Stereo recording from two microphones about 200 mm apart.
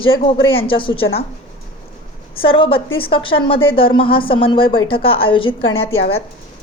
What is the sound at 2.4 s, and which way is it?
A woman's voice, 25° left (ahead or behind).